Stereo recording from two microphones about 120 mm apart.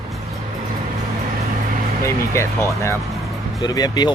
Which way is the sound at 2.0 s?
25° left (ahead or behind).